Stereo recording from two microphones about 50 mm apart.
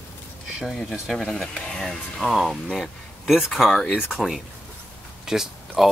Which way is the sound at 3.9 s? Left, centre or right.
Centre.